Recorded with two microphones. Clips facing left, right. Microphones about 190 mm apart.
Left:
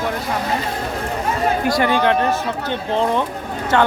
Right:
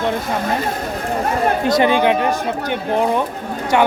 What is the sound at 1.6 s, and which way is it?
Speech, 20° right (ahead or behind).